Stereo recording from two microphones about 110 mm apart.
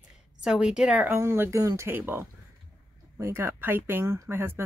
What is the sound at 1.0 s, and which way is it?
Speech, 20° right (ahead or behind).